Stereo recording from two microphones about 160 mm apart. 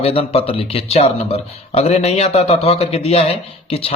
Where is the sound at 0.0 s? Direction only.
35° left (ahead or behind).